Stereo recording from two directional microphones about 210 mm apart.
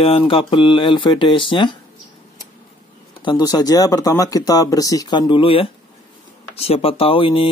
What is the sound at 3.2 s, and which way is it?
Speech, 20° left (ahead or behind).